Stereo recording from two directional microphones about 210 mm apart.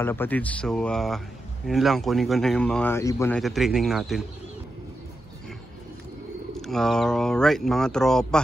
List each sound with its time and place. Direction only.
0.0 s speech: 10° left (ahead or behind)
3.3 s speech: centre (ahead or behind)
6.5 s speech: centre (ahead or behind)